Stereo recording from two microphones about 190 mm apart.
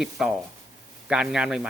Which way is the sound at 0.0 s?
Centre (ahead or behind).